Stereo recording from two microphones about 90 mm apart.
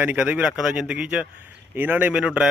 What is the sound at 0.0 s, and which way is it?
A man's voice, 15° right (ahead or behind).